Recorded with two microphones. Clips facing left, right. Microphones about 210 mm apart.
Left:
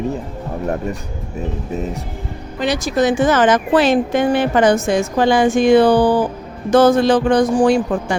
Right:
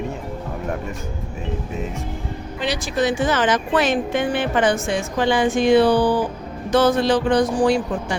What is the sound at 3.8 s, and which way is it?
Speech, 35° left (ahead or behind).